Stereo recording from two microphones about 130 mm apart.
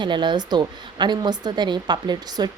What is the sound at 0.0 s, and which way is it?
A woman's voice, 35° right (ahead or behind).